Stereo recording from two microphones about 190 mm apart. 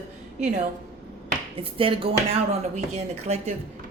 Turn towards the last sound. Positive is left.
turn(degrees=-35)  # may be behind; listen again after turning